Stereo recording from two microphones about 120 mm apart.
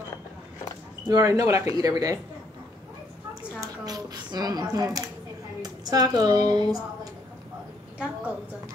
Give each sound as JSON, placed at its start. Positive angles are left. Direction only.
{"t": 1.0, "sound": "a woman's voice", "side_deg": -30}
{"t": 3.6, "sound": "a sound", "side_deg": -30}
{"t": 5.6, "sound": "a woman's voice", "side_deg": -35}